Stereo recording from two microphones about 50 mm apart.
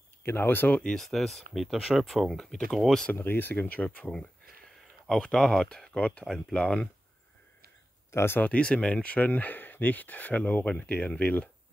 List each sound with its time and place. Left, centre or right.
0.2 s speech: left
0.8 s speech: centre
2.3 s speech: centre
3.2 s speech: left
5.0 s speech: centre
5.9 s speech: left
6.2 s speech: centre
8.1 s speech: left
8.5 s speech: left
10.7 s speech: left